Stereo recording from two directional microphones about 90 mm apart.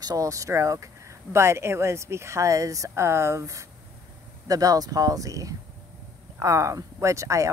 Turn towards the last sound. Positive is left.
turn(degrees=-35)  # may be behind; listen again after turning